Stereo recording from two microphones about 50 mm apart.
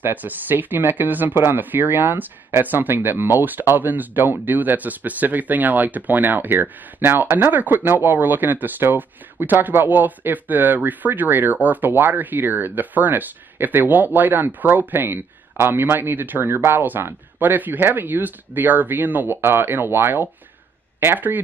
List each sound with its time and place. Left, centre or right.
0.0 s speech: right